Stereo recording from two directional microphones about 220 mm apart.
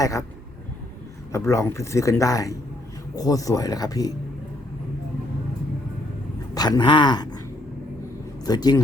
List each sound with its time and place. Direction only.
0.0 s speech: 15° left (ahead or behind)
1.3 s speech: 15° left (ahead or behind)
6.5 s speech: 20° left (ahead or behind)
8.4 s speech: 15° left (ahead or behind)